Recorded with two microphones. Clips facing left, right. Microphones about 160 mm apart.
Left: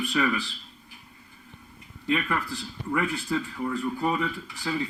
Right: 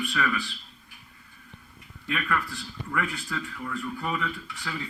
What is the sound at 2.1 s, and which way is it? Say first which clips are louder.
A man's voice: left 3 dB; 25° left (ahead or behind).